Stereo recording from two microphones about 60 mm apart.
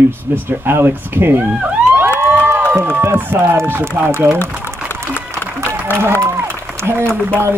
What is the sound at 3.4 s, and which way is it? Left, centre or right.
Speech, right.